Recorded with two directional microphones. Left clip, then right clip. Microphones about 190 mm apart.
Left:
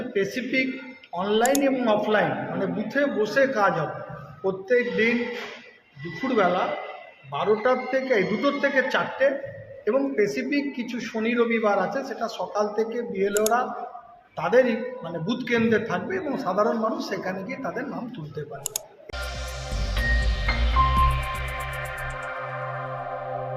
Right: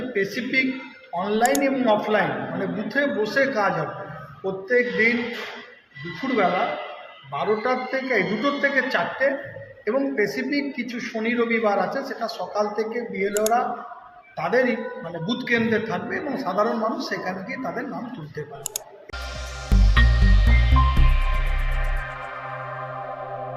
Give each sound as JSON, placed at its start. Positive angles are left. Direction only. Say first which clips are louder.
{"t": 0.3, "sound": "a man's voice", "louder": "right 3 dB", "side_deg": 5}
{"t": 6.2, "sound": "a man's voice", "louder": "right 1 dB", "side_deg": 5}
{"t": 19.7, "sound": "music", "louder": "right 3 dB", "side_deg": 0}